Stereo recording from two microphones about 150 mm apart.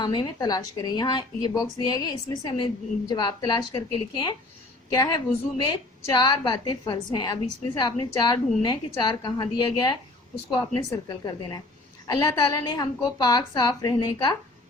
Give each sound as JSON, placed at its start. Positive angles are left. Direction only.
{"t": 0.0, "sound": "a woman's voice", "side_deg": 30}